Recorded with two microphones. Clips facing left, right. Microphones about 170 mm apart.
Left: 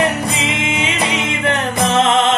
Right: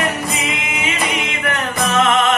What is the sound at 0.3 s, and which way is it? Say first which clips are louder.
Music: left 3 dB; 30° left (ahead or behind).